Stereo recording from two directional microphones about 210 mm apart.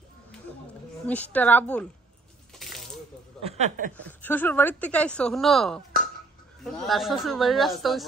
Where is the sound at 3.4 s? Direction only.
35° right (ahead or behind).